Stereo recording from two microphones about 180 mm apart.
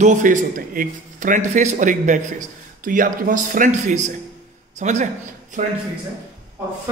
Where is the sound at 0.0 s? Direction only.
45° right (ahead or behind).